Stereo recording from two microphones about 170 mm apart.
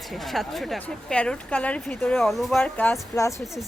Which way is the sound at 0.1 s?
Centre (ahead or behind).